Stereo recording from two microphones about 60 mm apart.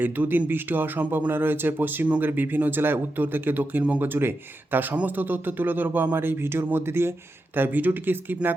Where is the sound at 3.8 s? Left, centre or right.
Right.